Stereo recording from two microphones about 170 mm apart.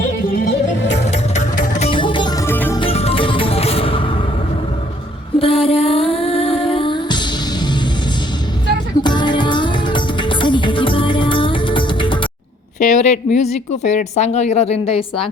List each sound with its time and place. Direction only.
0.8 s music: 90° left
1.0 s music: 40° left (ahead or behind)
1.8 s music: 30° left (ahead or behind); by 2.7 s 15° left (ahead or behind)
2.7 s music: 35° left (ahead or behind)
5.4 s music: 35° left (ahead or behind)
9.0 s music: 25° left (ahead or behind)
12.8 s a woman's voice: 45° left (ahead or behind)